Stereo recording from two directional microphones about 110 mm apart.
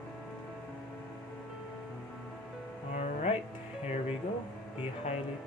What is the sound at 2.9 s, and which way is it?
Music, 80° left.